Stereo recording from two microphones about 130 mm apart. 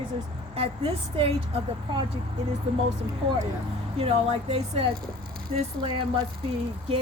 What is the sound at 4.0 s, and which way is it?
Speech, 50° right (ahead or behind).